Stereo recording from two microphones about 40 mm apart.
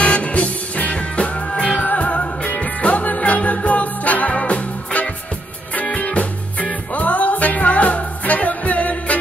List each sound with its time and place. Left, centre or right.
0.0 s music: left